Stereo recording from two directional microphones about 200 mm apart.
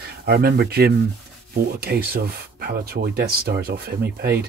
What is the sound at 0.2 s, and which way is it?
Speech, 50° right (ahead or behind).